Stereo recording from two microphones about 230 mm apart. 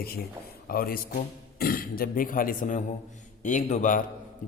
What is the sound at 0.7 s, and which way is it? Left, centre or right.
A man's voice, left.